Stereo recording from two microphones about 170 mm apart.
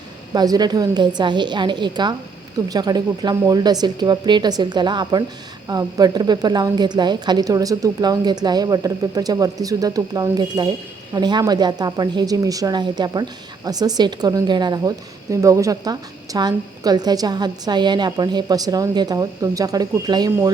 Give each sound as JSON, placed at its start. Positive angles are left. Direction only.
{"t": 0.3, "sound": "speech", "side_deg": -25}